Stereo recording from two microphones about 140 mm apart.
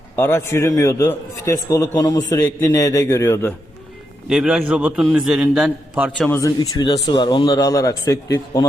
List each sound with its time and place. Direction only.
0.2 s a man's voice: 20° left (ahead or behind)
4.3 s a man's voice: 5° right (ahead or behind)
5.0 s a man's voice: centre (ahead or behind)
5.5 s a man's voice: 10° right (ahead or behind)
6.1 s speech: 10° left (ahead or behind)
6.4 s a man's voice: 25° left (ahead or behind)